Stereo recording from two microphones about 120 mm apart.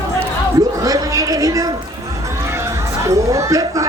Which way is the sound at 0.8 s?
30° right (ahead or behind).